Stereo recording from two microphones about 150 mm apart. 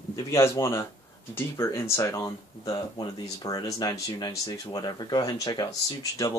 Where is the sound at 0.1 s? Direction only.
20° left (ahead or behind).